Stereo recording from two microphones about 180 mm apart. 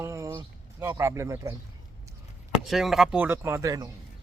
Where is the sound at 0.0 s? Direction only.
15° right (ahead or behind).